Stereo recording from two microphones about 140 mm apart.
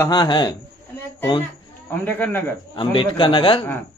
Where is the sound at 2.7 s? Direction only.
35° left (ahead or behind).